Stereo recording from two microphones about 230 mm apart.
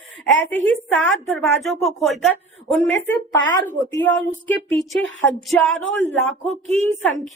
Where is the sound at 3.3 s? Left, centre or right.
Centre.